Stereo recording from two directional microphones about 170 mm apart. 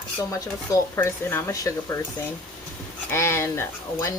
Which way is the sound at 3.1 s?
15° left (ahead or behind).